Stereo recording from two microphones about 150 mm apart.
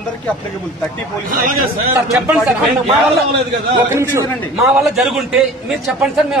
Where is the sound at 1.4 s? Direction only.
75° right (ahead or behind).